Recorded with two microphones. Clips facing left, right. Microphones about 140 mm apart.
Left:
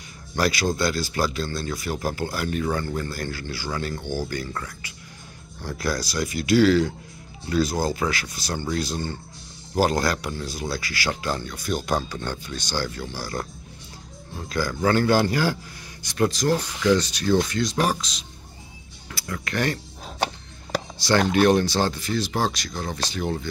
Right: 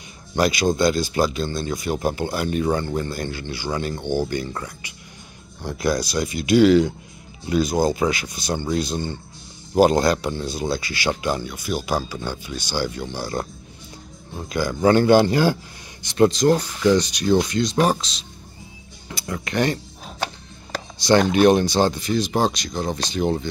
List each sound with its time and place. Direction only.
0.3 s speech: 20° right (ahead or behind)
21.0 s speech: 20° right (ahead or behind)